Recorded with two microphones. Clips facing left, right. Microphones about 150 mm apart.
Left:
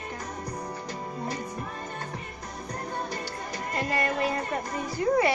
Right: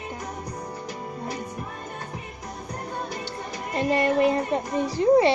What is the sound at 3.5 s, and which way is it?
Speech, 20° right (ahead or behind).